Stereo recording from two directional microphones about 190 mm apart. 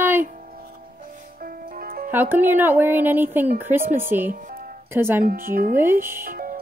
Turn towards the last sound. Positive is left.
turn(degrees=-45)  # may be behind; listen again after turning